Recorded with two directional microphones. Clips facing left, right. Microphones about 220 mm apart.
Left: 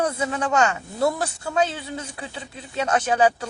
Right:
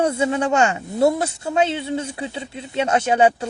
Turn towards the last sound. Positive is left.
turn(degrees=-25)  # may be behind; listen again after turning